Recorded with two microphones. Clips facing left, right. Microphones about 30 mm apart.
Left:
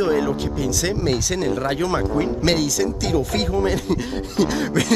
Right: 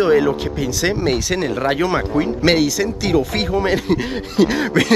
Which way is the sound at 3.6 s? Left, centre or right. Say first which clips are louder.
Right 5 dB; right.